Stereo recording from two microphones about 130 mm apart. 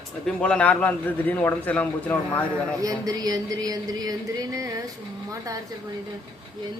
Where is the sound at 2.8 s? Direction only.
25° right (ahead or behind).